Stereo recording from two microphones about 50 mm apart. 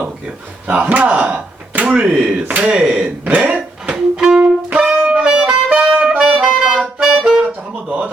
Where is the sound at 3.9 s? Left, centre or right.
Centre.